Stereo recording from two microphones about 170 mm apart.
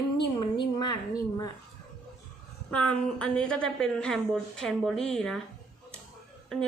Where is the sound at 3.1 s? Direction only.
5° left (ahead or behind).